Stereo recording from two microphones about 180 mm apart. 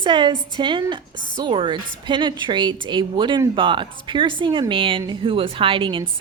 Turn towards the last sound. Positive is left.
turn(degrees=-30)  # may be behind; listen again after turning